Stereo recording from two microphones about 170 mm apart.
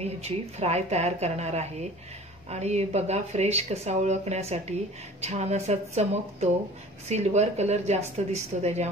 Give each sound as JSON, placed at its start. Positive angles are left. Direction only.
{"t": 0.0, "sound": "speech", "side_deg": -40}